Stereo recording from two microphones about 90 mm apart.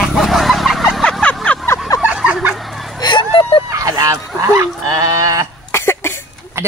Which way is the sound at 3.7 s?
40° right (ahead or behind).